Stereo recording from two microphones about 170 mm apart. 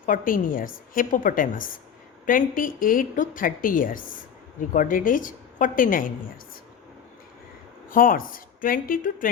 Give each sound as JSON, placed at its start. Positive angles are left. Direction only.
{"t": 0.0, "sound": "a woman's voice", "side_deg": 55}
{"t": 7.9, "sound": "a woman's voice", "side_deg": 55}